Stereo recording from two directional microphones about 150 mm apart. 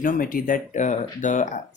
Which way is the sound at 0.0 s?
70° left (ahead or behind).